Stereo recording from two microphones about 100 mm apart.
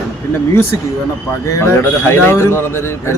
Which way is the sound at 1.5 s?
30° left (ahead or behind).